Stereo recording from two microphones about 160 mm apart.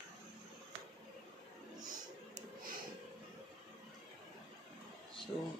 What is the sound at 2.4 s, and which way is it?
Music, 60° right (ahead or behind).